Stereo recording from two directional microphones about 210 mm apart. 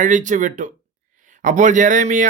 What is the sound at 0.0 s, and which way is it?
Speech, 35° right (ahead or behind).